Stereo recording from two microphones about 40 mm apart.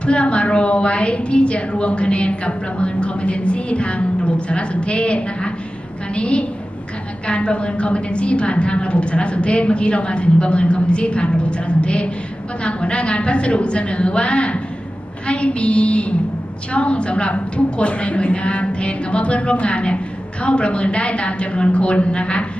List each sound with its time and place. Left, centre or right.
0.0 s a woman's voice: left